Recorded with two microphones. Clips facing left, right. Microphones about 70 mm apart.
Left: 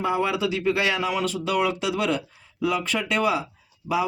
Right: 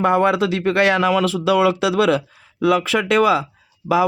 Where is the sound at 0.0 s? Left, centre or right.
Right.